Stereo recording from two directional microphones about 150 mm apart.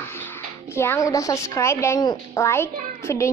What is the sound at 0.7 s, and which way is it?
A woman's voice, 20° left (ahead or behind).